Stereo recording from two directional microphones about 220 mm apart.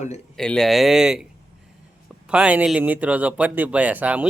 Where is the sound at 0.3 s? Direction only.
5° left (ahead or behind).